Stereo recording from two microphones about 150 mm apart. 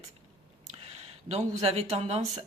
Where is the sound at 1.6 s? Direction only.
45° right (ahead or behind).